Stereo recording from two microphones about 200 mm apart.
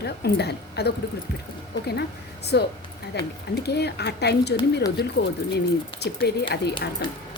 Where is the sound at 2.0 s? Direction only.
55° left (ahead or behind).